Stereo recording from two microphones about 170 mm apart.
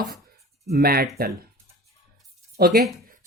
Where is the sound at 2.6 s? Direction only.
65° right (ahead or behind).